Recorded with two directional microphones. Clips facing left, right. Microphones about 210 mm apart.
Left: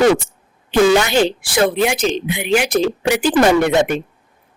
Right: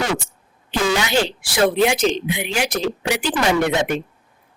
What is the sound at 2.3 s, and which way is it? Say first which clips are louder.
Speech: left 5 dB; 55° left (ahead or behind).